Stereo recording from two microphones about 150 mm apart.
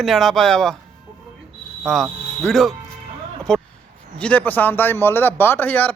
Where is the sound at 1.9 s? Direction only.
Centre (ahead or behind).